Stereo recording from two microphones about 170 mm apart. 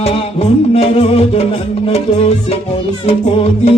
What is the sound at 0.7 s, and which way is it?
Music, 35° left (ahead or behind).